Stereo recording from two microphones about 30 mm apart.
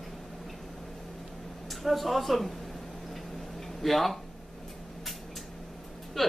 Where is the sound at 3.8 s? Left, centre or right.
Centre.